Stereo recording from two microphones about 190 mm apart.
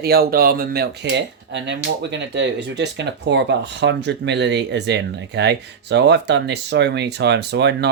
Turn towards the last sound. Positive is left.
turn(degrees=-60)  # may be behind; listen again after turning